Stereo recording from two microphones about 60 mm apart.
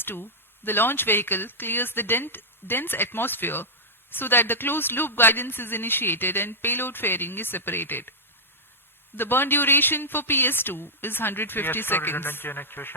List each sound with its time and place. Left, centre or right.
0.0 s speech: left
9.1 s speech: left